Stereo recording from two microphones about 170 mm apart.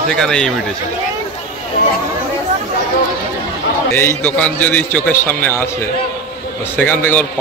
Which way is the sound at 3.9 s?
10° left (ahead or behind).